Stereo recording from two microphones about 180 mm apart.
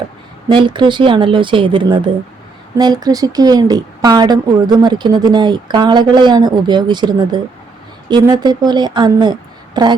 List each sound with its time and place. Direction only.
0.4 s a woman's voice: 25° right (ahead or behind)